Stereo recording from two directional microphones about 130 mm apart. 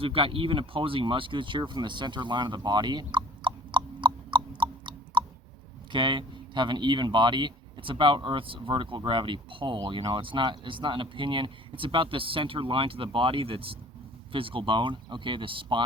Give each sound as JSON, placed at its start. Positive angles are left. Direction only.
{"t": 0.0, "sound": "speech", "side_deg": -45}